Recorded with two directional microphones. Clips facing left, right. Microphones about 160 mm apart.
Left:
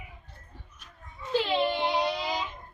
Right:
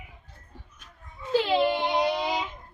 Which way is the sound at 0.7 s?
50° right (ahead or behind).